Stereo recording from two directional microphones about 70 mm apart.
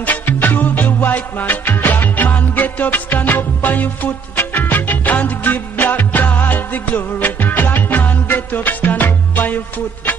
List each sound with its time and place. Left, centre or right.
0.0 s music: left